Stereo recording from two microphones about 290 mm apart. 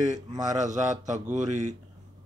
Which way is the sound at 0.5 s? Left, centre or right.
Right.